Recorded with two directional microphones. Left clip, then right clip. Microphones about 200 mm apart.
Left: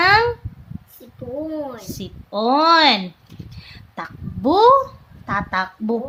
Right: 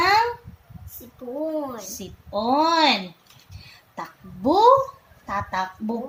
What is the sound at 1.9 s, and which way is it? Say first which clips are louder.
A woman's voice: left 5 dB; 35° left (ahead or behind).